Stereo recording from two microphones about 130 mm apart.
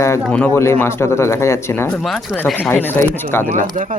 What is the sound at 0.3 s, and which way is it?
Speech, 10° left (ahead or behind).